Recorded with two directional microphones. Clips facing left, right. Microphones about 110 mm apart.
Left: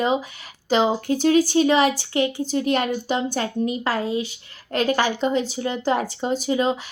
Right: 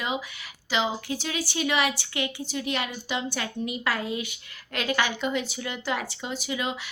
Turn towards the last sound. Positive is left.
turn(degrees=40)  # may be behind; listen again after turning